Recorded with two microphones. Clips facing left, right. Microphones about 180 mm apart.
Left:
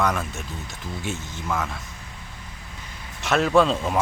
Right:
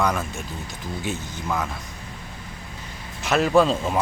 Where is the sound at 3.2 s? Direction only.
Centre (ahead or behind).